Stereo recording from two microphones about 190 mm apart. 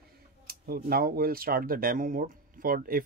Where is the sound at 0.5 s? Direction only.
50° right (ahead or behind).